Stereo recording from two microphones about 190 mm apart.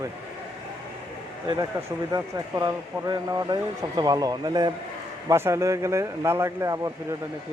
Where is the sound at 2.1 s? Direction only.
20° right (ahead or behind).